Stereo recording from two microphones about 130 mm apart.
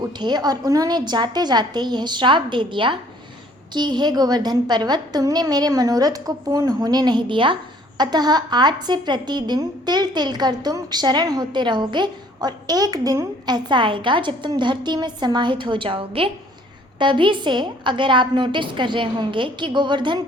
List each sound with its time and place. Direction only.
0.2 s a woman's voice: 35° right (ahead or behind)